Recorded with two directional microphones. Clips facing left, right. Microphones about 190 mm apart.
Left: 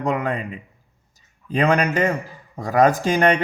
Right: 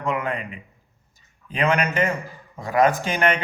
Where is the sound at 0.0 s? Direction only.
35° left (ahead or behind).